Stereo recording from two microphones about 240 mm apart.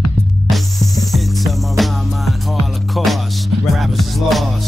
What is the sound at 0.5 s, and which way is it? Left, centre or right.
Music, centre.